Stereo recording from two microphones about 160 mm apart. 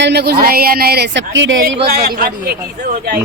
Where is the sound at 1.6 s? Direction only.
70° right (ahead or behind).